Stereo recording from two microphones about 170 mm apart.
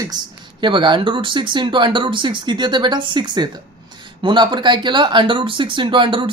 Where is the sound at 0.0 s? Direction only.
25° right (ahead or behind).